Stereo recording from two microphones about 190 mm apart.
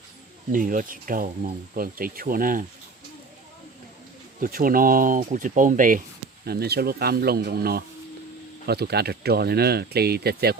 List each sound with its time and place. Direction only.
0.5 s speech: 45° right (ahead or behind)
4.4 s speech: 50° right (ahead or behind)
6.4 s speech: 55° right (ahead or behind)